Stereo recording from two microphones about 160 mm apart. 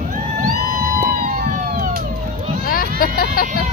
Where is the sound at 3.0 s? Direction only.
65° left (ahead or behind).